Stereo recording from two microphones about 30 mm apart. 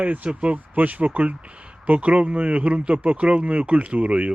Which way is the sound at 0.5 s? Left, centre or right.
Right.